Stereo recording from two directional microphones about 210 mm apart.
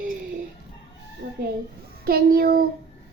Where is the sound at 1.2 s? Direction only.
45° right (ahead or behind).